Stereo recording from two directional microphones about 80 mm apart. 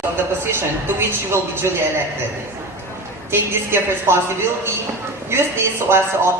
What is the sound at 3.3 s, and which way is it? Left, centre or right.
Speech, right.